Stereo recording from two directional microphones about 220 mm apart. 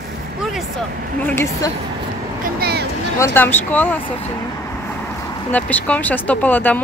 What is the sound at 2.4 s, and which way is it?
Speech, 45° right (ahead or behind).